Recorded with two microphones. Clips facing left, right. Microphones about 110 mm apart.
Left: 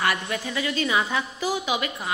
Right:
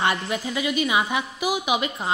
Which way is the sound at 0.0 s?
20° right (ahead or behind).